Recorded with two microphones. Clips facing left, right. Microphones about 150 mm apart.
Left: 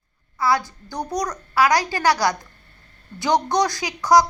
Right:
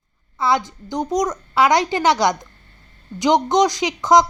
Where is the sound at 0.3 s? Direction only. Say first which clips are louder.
Right 2 dB; 20° right (ahead or behind).